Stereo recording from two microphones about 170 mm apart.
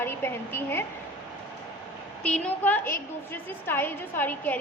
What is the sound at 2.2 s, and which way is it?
A woman's voice, 5° left (ahead or behind).